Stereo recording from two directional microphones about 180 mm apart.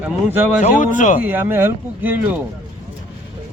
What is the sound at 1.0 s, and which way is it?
Speech, 45° left (ahead or behind).